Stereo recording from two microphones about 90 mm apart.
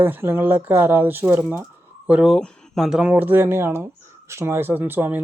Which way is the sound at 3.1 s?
20° right (ahead or behind).